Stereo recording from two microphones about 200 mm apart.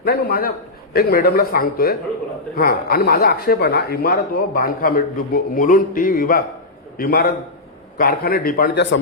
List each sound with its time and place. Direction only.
0.0 s speech: 50° left (ahead or behind)